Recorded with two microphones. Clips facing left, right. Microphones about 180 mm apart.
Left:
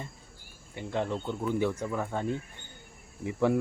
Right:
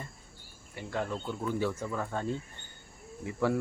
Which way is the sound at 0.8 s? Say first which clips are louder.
Left 3 dB; 20° left (ahead or behind).